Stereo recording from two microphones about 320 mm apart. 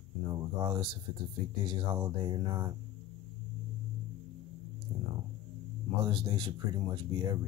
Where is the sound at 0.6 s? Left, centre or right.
Centre.